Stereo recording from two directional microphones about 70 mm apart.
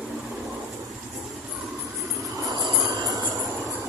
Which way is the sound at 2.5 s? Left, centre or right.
Right.